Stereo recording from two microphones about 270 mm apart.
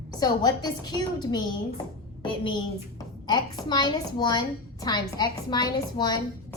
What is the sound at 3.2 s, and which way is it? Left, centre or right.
A woman's voice, centre.